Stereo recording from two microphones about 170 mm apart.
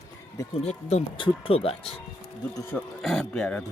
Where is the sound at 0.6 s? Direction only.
40° left (ahead or behind).